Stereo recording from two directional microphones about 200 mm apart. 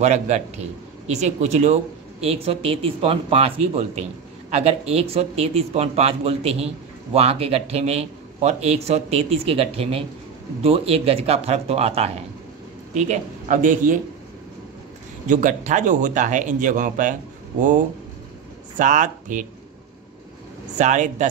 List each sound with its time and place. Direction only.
0.0 s speech: 35° right (ahead or behind)
15.2 s speech: 40° right (ahead or behind)
20.7 s speech: 35° right (ahead or behind)